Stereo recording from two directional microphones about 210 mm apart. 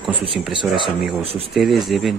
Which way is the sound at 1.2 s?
30° right (ahead or behind).